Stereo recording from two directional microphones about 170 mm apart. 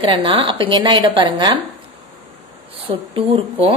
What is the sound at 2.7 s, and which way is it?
Speech, 35° right (ahead or behind).